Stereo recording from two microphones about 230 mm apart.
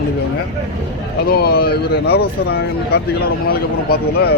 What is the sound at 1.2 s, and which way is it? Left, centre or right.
Speech, left.